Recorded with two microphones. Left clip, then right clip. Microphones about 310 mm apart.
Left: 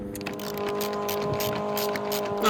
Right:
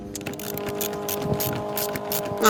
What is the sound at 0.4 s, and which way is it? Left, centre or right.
Vehicle, centre.